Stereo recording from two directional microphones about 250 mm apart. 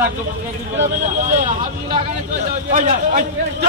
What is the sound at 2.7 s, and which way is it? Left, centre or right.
Speech, right.